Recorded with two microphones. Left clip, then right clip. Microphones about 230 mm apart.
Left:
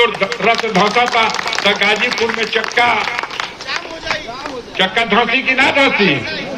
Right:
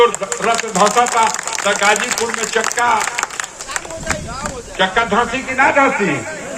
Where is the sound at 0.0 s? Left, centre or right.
Right.